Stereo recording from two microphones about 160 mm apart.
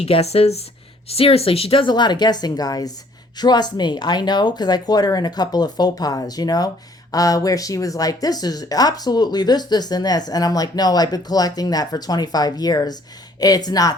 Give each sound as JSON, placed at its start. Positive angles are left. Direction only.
{"t": 0.0, "sound": "speech", "side_deg": 40}